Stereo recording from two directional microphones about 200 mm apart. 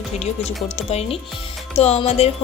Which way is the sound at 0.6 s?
30° left (ahead or behind).